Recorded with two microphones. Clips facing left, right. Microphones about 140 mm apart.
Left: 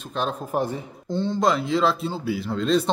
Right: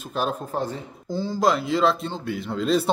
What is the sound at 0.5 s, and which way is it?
Speech, 15° left (ahead or behind).